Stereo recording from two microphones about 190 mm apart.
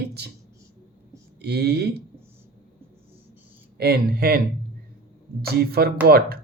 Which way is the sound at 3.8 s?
55° right (ahead or behind).